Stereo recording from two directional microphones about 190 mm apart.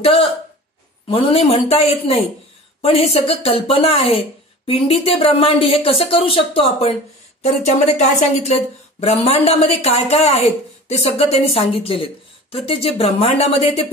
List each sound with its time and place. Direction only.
1.0 s speech: 30° left (ahead or behind)